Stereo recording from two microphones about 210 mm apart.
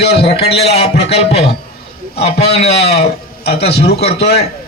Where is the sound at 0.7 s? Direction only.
30° left (ahead or behind).